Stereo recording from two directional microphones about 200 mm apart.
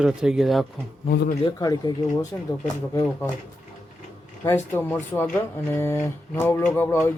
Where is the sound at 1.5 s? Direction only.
20° left (ahead or behind).